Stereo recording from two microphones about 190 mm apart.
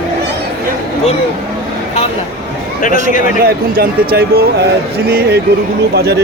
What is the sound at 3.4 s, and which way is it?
Speech, 55° right (ahead or behind).